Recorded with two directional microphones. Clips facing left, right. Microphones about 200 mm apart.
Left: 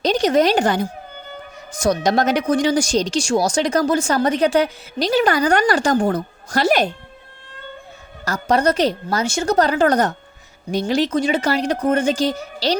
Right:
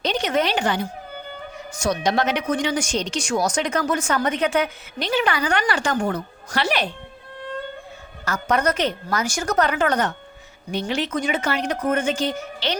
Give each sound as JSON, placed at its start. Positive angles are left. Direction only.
{"t": 0.0, "sound": "speech", "side_deg": 40}
{"t": 8.2, "sound": "speech", "side_deg": 35}